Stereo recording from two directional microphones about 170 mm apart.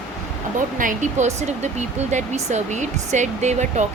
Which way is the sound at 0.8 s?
50° right (ahead or behind).